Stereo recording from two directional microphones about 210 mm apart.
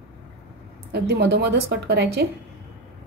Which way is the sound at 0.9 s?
50° right (ahead or behind).